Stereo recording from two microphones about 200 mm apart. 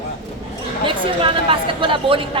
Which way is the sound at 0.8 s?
25° right (ahead or behind).